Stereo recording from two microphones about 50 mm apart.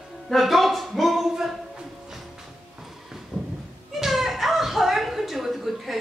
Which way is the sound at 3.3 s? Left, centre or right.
Centre.